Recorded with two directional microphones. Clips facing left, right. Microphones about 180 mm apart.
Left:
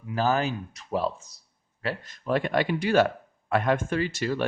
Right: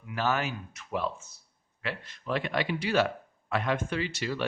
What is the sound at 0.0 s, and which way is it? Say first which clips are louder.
A man's voice: left 5 dB; 35° left (ahead or behind).